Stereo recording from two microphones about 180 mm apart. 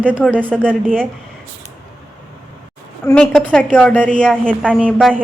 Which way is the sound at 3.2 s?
5° left (ahead or behind).